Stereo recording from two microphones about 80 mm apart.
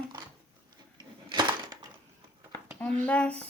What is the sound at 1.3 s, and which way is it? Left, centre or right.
Crushing, right.